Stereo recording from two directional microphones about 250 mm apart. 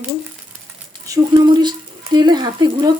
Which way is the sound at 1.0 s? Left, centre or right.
Centre.